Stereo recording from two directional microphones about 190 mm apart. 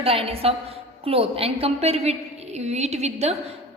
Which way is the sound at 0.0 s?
30° right (ahead or behind).